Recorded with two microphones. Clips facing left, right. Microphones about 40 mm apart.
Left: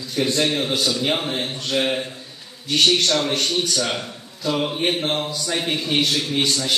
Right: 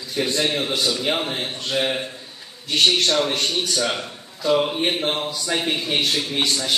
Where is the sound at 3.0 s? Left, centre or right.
Right.